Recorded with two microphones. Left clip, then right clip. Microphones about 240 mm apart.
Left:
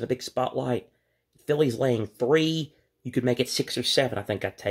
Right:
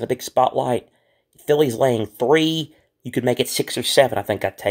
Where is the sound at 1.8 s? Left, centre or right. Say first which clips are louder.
Right 7 dB; right.